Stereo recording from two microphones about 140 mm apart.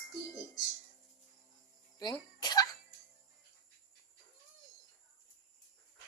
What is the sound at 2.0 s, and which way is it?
Speech, 30° left (ahead or behind).